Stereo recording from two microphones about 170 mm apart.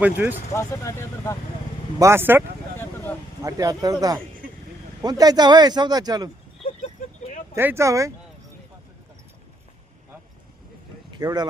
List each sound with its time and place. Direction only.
0.0 s speech: 10° right (ahead or behind)
0.5 s speech: 15° left (ahead or behind)
2.0 s speech: 15° right (ahead or behind)
3.4 s speech: 20° right (ahead or behind)
5.0 s speech: 20° right (ahead or behind)
6.6 s vehicle: 40° left (ahead or behind)
7.5 s speech: 15° right (ahead or behind)
11.1 s speech: 25° right (ahead or behind)